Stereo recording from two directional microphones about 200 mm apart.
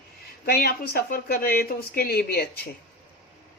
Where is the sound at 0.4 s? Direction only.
50° left (ahead or behind).